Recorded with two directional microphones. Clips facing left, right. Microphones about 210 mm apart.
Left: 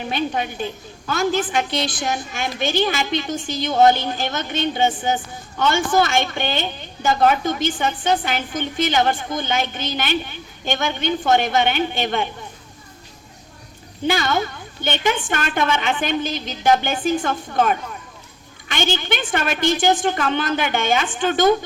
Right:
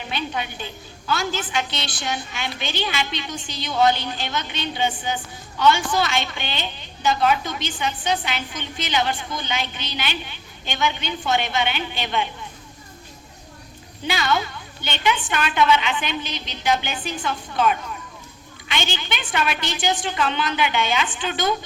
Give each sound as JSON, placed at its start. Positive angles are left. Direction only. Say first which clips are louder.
{"t": 0.1, "sound": "a woman's voice", "louder": "left 4 dB", "side_deg": 45}
{"t": 14.1, "sound": "a woman's voice", "louder": "left 2 dB", "side_deg": 45}